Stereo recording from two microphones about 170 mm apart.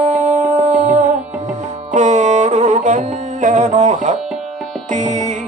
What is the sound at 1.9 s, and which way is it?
Music, 45° right (ahead or behind).